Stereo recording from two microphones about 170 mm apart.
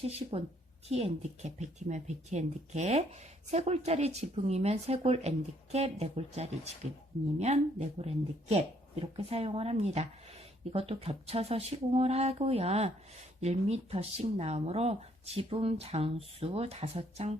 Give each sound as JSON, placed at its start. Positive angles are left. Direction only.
{"t": 0.2, "sound": "speech", "side_deg": -40}